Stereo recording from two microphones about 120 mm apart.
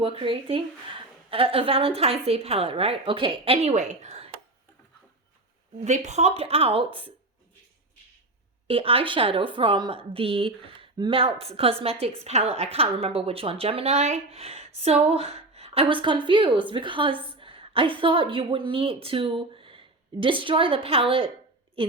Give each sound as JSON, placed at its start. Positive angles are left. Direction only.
{"t": 0.0, "sound": "a woman's voice", "side_deg": -50}
{"t": 5.8, "sound": "a woman's voice", "side_deg": -75}
{"t": 8.6, "sound": "a woman's voice", "side_deg": -50}